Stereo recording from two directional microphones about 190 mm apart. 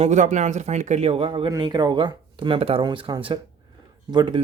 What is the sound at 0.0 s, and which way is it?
Speech, 40° right (ahead or behind).